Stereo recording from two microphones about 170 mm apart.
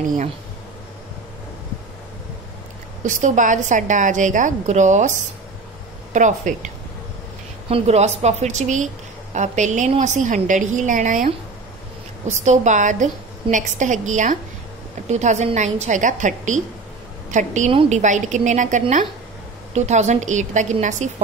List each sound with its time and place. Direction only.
3.0 s a woman's voice: 45° right (ahead or behind)
6.1 s a woman's voice: 45° right (ahead or behind)
7.7 s a woman's voice: 40° right (ahead or behind)